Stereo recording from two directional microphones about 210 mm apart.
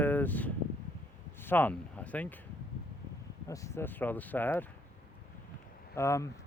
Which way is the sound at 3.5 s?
15° left (ahead or behind).